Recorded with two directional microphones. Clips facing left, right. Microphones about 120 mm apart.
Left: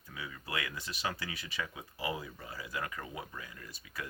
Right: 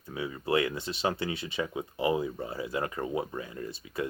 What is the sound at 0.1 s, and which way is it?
Speech, 30° right (ahead or behind).